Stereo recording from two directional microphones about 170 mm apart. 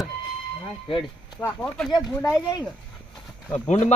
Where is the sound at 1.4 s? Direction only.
15° left (ahead or behind).